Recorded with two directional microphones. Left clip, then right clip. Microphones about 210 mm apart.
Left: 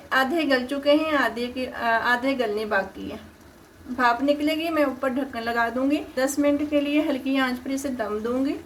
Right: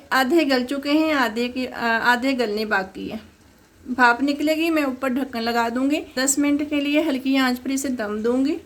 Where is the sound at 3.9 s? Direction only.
50° right (ahead or behind).